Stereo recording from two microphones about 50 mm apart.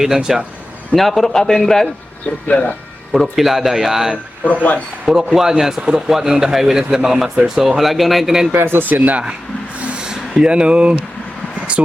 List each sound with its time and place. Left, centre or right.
0.0 s speech: centre
0.9 s a man's voice: centre
2.5 s speech: left
3.1 s speech: centre
8.5 s speech: right
9.8 s a sound: centre